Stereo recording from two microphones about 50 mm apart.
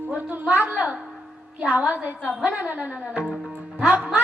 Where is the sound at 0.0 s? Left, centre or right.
Right.